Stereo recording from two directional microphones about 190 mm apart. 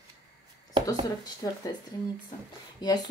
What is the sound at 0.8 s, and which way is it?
Speech, 20° left (ahead or behind).